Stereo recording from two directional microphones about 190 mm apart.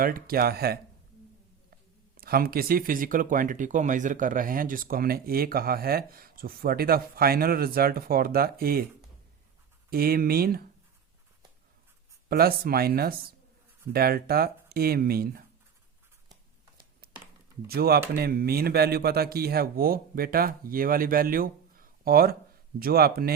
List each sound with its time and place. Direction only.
0.0 s speech: 50° right (ahead or behind)
9.9 s speech: 55° right (ahead or behind)
12.3 s speech: 55° right (ahead or behind)
17.7 s speech: 55° right (ahead or behind)